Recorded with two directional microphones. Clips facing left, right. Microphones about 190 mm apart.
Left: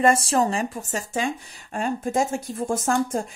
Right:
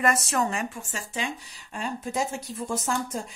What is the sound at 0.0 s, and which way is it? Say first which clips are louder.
Speech: left 6 dB; 30° left (ahead or behind).